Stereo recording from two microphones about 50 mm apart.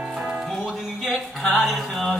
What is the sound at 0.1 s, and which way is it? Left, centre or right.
Music, centre.